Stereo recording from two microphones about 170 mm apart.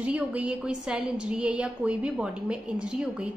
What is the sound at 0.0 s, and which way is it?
A woman's voice, 10° right (ahead or behind).